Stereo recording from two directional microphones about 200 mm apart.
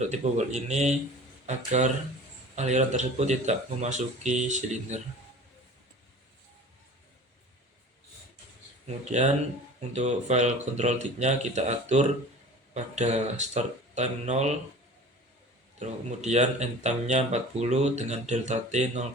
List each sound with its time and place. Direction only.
0.1 s speech: 35° right (ahead or behind)
9.0 s speech: 35° right (ahead or behind)
15.8 s speech: 35° right (ahead or behind)